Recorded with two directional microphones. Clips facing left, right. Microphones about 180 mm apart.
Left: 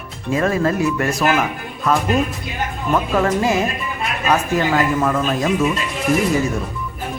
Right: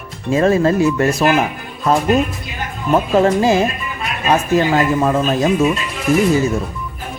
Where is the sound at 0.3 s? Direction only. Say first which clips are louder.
Right 4 dB; 25° right (ahead or behind).